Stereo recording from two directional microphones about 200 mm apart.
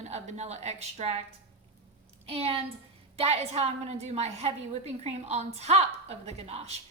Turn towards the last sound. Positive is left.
turn(degrees=-30)  # may be behind; listen again after turning